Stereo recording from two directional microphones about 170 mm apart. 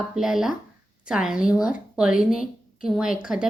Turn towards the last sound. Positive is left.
turn(degrees=-5)  # may be behind; listen again after turning